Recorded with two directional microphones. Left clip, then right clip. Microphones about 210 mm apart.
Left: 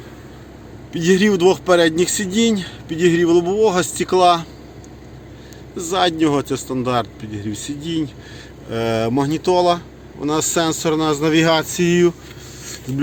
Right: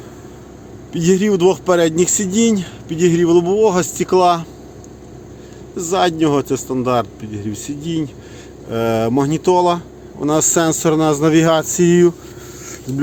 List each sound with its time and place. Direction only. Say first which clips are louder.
0.9 s speech: right 1 dB; 15° right (ahead or behind)
5.7 s speech: right 2 dB; 15° right (ahead or behind)